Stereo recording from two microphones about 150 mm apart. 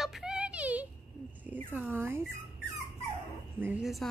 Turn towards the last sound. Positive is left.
turn(degrees=0)  # may be behind; listen again after turning